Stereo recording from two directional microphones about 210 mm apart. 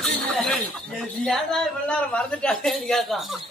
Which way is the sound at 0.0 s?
Centre (ahead or behind).